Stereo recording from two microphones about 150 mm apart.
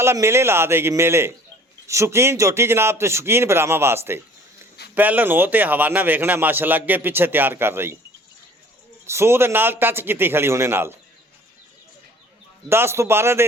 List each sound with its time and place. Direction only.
0.0 s a man's voice: 15° right (ahead or behind)
9.0 s a man's voice: 15° right (ahead or behind)
12.6 s a man's voice: 15° right (ahead or behind)